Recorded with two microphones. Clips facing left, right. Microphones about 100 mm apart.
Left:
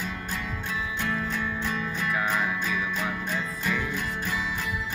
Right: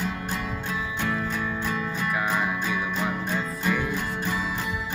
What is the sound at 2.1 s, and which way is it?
Music, 10° right (ahead or behind).